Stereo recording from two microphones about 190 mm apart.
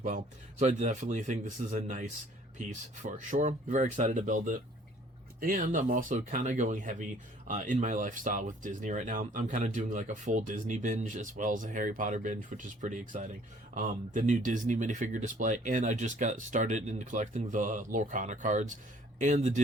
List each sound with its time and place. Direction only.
0.6 s speech: 40° right (ahead or behind)